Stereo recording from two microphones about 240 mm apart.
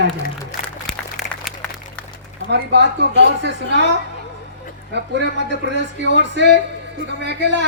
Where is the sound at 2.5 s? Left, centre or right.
Right.